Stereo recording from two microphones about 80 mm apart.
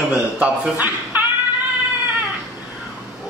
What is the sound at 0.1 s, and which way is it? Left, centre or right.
A man's voice, centre.